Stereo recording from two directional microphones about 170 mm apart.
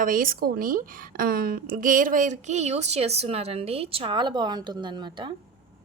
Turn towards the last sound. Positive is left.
turn(degrees=-25)  # may be behind; listen again after turning